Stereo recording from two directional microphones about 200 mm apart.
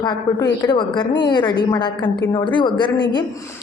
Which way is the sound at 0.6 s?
20° left (ahead or behind).